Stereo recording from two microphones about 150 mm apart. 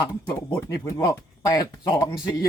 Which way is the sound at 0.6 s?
25° left (ahead or behind).